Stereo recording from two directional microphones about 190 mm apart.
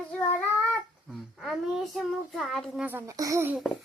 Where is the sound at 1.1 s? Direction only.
Centre (ahead or behind).